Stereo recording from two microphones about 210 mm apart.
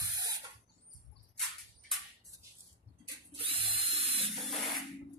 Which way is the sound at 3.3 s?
25° right (ahead or behind).